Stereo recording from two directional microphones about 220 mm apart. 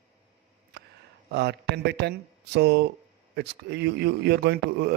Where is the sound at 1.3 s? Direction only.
50° right (ahead or behind).